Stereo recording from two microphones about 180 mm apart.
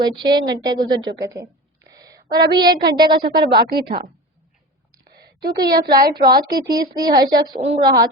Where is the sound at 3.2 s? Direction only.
60° right (ahead or behind).